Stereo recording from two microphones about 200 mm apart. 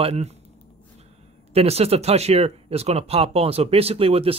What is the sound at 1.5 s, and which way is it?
Speech, 30° right (ahead or behind).